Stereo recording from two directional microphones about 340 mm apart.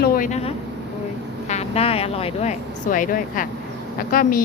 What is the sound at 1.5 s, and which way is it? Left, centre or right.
A woman's voice, centre.